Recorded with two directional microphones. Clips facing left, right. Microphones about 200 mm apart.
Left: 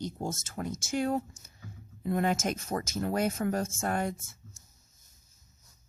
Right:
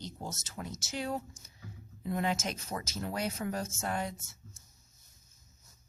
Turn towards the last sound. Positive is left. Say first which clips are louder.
# left 4 dB
turn(degrees=50)  # may be behind; listen again after turning